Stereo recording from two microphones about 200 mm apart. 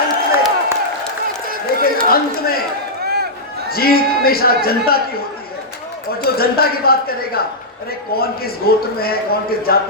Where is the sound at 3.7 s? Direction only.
50° left (ahead or behind).